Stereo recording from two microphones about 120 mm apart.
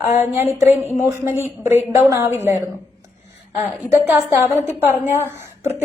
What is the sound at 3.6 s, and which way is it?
Speech, 20° right (ahead or behind).